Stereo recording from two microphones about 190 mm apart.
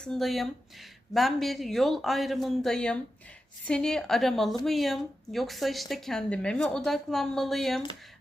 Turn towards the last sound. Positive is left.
turn(degrees=0)  # may be behind; listen again after turning